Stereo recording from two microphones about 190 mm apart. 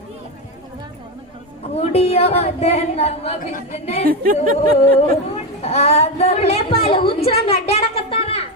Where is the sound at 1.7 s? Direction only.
30° left (ahead or behind).